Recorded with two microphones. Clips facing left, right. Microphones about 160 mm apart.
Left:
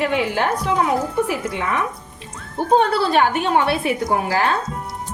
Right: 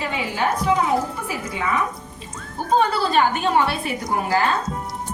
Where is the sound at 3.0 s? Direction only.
70° left (ahead or behind).